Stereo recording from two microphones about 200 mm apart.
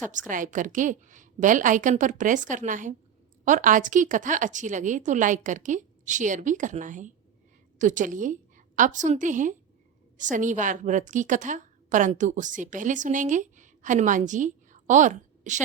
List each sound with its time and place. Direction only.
0.1 s a woman's voice: 40° right (ahead or behind)